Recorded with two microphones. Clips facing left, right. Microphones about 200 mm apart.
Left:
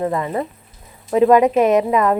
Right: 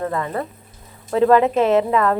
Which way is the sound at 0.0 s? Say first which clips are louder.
Left 3 dB; 15° left (ahead or behind).